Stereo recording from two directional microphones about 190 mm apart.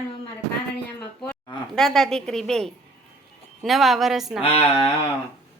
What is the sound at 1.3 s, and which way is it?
A woman's voice, centre (ahead or behind).